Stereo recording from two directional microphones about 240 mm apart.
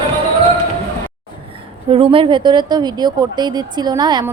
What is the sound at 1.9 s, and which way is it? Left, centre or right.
Speech, right.